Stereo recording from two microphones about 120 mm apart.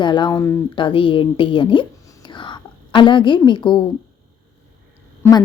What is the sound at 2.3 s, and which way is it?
Whispering, 40° left (ahead or behind).